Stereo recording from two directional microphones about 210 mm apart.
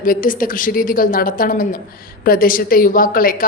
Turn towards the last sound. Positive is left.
turn(degrees=40)  # may be behind; listen again after turning